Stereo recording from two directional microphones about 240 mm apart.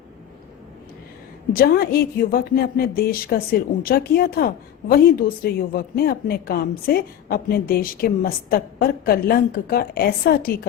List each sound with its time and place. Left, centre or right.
1.5 s a woman's voice: left